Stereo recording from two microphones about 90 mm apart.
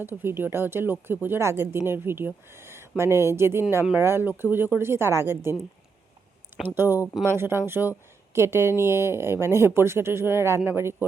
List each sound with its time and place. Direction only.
0.0 s speech: 20° right (ahead or behind)
6.7 s speech: 25° right (ahead or behind)